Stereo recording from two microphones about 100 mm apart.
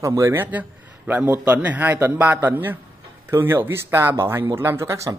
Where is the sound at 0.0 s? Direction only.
30° right (ahead or behind).